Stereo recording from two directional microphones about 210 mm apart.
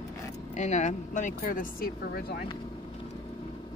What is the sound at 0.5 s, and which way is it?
Speech, 35° left (ahead or behind).